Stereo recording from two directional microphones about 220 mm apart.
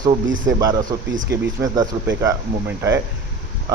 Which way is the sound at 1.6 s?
15° right (ahead or behind).